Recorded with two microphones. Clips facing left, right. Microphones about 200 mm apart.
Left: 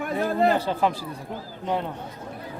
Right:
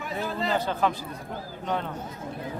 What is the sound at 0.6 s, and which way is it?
Speech, 30° left (ahead or behind).